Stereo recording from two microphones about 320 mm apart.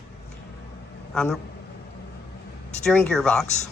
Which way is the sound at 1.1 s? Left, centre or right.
Centre.